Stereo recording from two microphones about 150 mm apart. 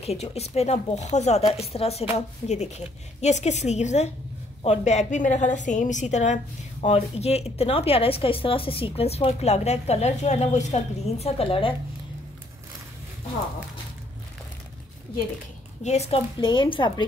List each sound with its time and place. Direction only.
0.0 s a woman's voice: 45° left (ahead or behind)
15.8 s a woman's voice: 45° left (ahead or behind)